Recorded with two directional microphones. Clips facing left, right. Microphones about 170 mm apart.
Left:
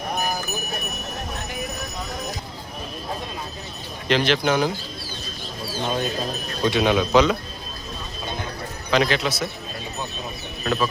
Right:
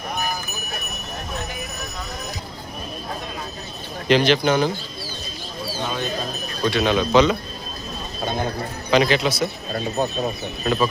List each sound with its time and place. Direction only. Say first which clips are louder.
4.1 s speech: right 3 dB; centre (ahead or behind)
6.6 s a man's voice: even; 15° left (ahead or behind)
8.9 s speech: right 3 dB; centre (ahead or behind)
10.0 s speech: right 10 dB; 45° right (ahead or behind)
10.6 s speech: right 2 dB; 10° right (ahead or behind)